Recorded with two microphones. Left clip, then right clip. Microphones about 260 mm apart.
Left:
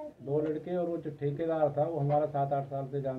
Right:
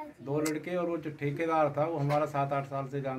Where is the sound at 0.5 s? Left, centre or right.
Centre.